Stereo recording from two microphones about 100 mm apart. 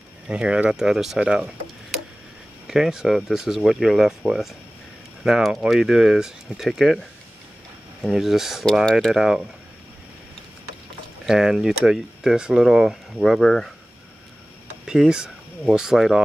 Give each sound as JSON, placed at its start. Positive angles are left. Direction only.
{"t": 0.3, "sound": "speech", "side_deg": -10}
{"t": 2.6, "sound": "speech", "side_deg": -5}
{"t": 8.0, "sound": "speech", "side_deg": 0}
{"t": 11.2, "sound": "speech", "side_deg": -5}
{"t": 14.9, "sound": "speech", "side_deg": -5}